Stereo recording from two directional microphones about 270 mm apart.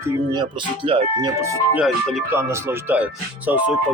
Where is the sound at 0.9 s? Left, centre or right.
Centre.